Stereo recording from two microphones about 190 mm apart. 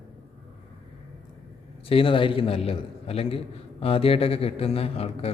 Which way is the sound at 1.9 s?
30° left (ahead or behind).